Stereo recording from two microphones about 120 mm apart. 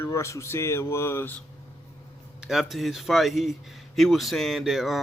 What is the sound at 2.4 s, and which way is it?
Speech, 5° right (ahead or behind).